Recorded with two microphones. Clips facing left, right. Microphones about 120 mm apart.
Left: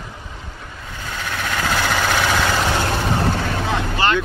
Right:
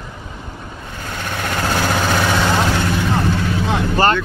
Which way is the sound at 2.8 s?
30° left (ahead or behind).